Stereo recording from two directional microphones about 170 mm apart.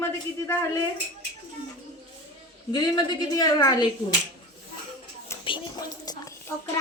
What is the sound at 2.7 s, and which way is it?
A woman's voice, 25° left (ahead or behind).